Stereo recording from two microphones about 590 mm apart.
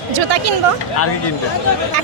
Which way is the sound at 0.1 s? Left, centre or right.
Right.